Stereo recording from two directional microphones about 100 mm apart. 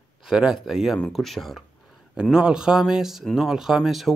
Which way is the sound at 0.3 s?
5° right (ahead or behind).